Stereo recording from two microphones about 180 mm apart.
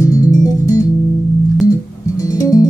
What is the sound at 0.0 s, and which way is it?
Music, 20° left (ahead or behind).